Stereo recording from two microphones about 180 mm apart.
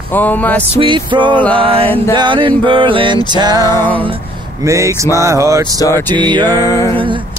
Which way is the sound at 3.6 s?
15° left (ahead or behind).